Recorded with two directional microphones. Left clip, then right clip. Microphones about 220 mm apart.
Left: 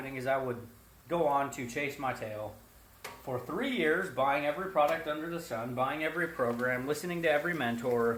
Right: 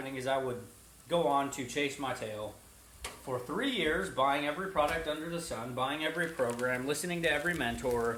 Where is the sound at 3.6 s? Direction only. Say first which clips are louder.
Left 2 dB; 15° left (ahead or behind).